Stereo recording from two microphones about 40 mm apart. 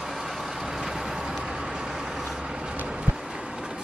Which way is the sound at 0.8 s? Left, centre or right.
Centre.